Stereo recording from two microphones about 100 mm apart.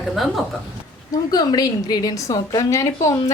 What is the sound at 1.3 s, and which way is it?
A woman's voice, 40° left (ahead or behind).